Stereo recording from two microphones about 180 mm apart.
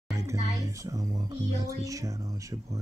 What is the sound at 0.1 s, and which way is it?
Music, 15° right (ahead or behind).